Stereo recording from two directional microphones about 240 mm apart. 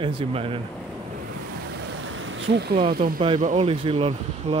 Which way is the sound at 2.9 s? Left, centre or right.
Right.